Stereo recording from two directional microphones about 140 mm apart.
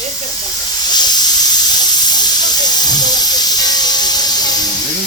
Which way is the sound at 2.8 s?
30° left (ahead or behind).